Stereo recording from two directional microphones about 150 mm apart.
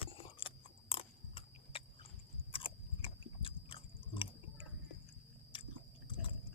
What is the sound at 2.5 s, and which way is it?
Biting, 40° left (ahead or behind).